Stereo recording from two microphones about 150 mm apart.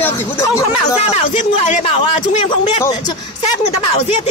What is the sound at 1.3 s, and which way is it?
Speech, 55° left (ahead or behind).